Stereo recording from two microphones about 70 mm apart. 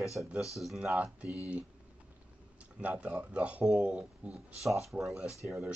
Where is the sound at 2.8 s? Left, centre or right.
Centre.